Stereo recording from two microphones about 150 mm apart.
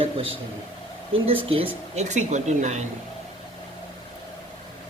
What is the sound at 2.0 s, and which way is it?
Speech, 50° right (ahead or behind).